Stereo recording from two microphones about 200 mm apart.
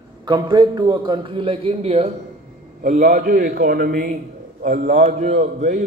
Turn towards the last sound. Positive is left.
turn(degrees=-40)  # may be behind; listen again after turning